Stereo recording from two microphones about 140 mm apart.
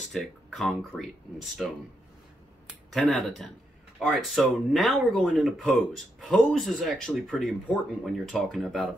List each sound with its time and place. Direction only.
0.0 s speech: centre (ahead or behind)
2.9 s speech: centre (ahead or behind)